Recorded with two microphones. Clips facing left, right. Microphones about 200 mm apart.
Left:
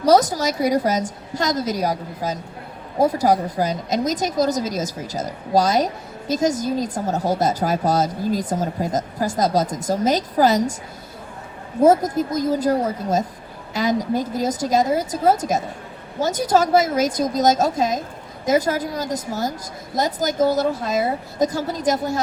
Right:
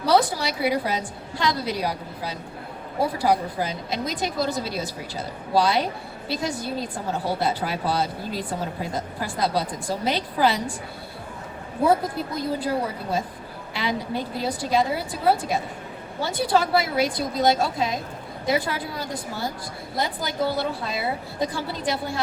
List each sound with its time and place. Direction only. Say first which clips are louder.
0.0 s a woman's voice: left 5 dB; 40° left (ahead or behind)
11.8 s a woman's voice: left 6 dB; 40° left (ahead or behind)